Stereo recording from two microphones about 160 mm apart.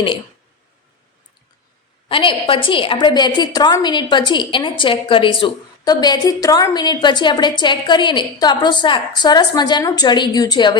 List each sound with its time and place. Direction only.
2.0 s a woman's voice: 35° left (ahead or behind)